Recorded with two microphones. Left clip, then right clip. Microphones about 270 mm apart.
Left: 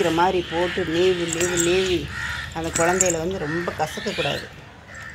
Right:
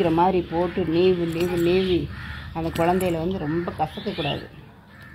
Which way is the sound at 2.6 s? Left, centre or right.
Right.